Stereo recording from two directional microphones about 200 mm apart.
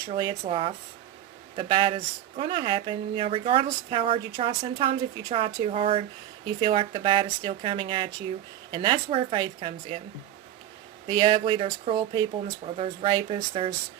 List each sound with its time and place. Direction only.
0.1 s speech: 25° right (ahead or behind)
11.0 s speech: 25° right (ahead or behind)